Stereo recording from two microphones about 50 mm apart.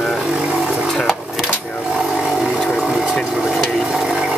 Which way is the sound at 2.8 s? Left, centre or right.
Centre.